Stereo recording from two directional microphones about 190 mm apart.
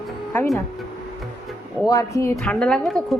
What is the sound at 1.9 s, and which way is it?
Speech, 15° left (ahead or behind).